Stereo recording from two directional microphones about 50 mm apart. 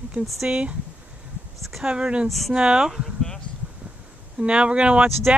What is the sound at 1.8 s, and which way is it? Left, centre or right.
Speech, right.